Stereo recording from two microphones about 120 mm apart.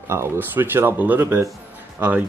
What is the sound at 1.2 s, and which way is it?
Speech, 25° right (ahead or behind).